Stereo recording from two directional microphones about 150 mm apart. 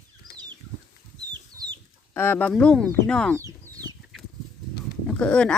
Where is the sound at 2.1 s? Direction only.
15° left (ahead or behind).